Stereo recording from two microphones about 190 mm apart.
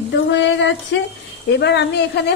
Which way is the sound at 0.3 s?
70° left (ahead or behind).